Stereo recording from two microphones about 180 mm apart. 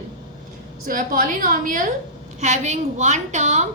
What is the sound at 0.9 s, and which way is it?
A woman's voice, 50° right (ahead or behind).